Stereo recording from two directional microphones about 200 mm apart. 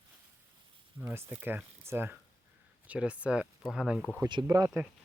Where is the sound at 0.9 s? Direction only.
10° right (ahead or behind).